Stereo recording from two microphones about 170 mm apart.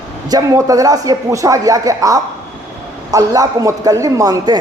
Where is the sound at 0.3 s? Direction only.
20° right (ahead or behind).